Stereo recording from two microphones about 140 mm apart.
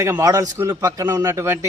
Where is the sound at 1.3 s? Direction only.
15° right (ahead or behind).